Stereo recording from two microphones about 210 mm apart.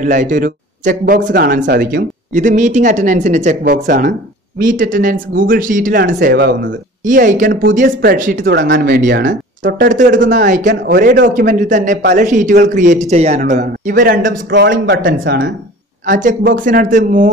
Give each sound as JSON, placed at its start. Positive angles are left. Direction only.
{"t": 0.0, "sound": "speech", "side_deg": -40}
{"t": 6.3, "sound": "speech", "side_deg": -55}
{"t": 7.1, "sound": "speech", "side_deg": -40}
{"t": 9.6, "sound": "speech", "side_deg": -40}
{"t": 10.7, "sound": "speech", "side_deg": -50}
{"t": 14.3, "sound": "speech", "side_deg": -60}
{"t": 16.1, "sound": "speech", "side_deg": -35}